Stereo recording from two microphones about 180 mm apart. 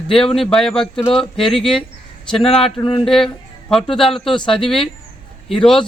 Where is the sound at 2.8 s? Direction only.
30° left (ahead or behind).